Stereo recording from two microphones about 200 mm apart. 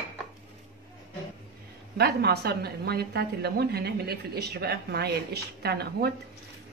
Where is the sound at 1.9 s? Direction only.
55° right (ahead or behind).